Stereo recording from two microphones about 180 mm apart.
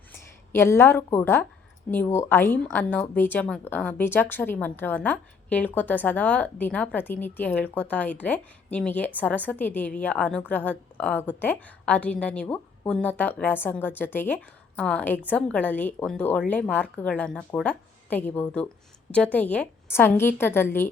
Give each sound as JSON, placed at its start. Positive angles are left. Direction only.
{"t": 0.1, "sound": "speech", "side_deg": 15}